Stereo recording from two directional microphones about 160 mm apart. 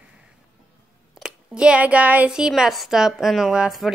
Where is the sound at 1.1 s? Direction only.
5° right (ahead or behind).